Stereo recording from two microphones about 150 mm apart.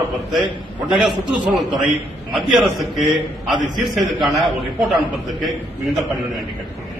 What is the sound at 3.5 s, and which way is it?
Speech, 30° right (ahead or behind).